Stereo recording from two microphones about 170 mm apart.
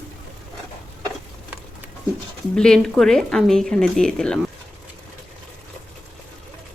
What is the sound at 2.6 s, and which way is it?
Speech, 5° left (ahead or behind).